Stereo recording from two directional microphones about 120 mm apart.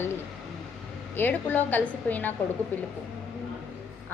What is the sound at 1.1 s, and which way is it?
A woman's voice, 15° left (ahead or behind).